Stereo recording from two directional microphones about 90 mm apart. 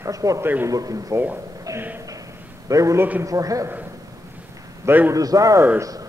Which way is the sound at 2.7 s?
35° right (ahead or behind).